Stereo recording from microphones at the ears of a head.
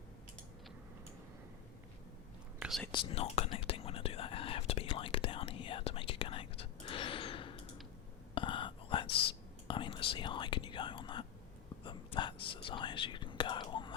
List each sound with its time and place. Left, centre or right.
2.9 s whispering: left